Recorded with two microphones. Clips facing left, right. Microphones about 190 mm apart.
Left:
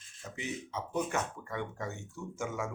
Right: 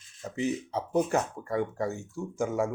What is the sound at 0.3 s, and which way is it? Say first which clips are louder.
Speech: right 9 dB; 35° right (ahead or behind).